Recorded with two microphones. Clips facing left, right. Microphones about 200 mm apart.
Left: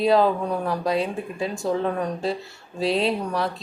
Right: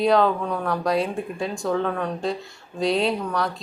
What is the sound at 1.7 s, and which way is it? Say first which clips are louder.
Speech: right 1 dB; 35° left (ahead or behind).